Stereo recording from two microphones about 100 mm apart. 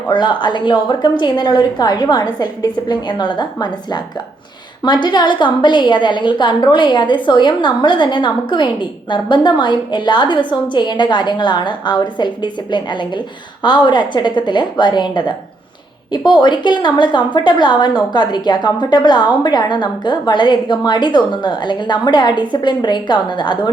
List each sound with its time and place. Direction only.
0.1 s a woman's voice: 50° left (ahead or behind)
16.4 s a woman's voice: 50° left (ahead or behind)